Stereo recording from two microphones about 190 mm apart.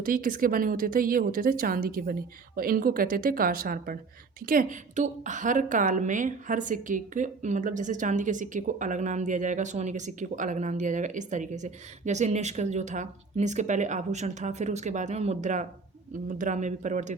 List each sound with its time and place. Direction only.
0.0 s a woman's voice: 45° right (ahead or behind)